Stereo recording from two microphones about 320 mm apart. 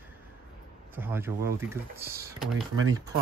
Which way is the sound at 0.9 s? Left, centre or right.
Centre.